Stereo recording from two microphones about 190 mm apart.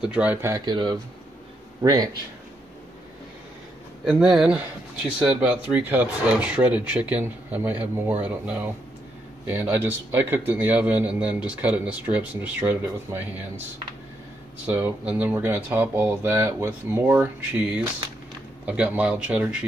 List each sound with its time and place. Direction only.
0.0 s a man's voice: 5° right (ahead or behind)
4.0 s speech: 5° right (ahead or behind)
14.7 s speech: 10° right (ahead or behind)